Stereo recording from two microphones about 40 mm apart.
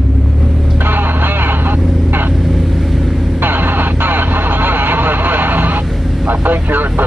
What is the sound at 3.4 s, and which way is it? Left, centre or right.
Vehicle, right.